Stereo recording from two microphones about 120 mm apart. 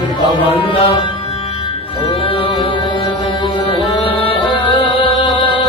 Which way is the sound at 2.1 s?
50° left (ahead or behind).